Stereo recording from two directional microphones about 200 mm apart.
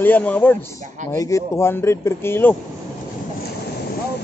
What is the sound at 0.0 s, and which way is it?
Speech, 10° left (ahead or behind).